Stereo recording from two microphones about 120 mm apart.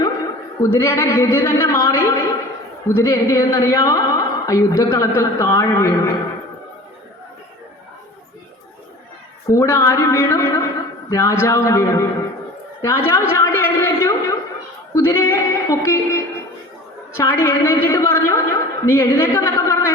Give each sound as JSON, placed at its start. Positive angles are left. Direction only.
{"t": 0.6, "sound": "a woman's voice", "side_deg": 25}
{"t": 9.5, "sound": "a woman's voice", "side_deg": 25}
{"t": 12.8, "sound": "a sound", "side_deg": 25}
{"t": 14.9, "sound": "a woman's voice", "side_deg": 25}